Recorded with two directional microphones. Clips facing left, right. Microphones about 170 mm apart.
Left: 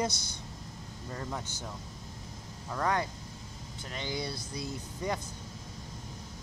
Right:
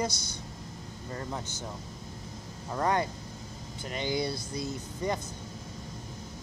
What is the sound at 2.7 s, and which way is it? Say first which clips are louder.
Speech: right 2 dB; 20° right (ahead or behind).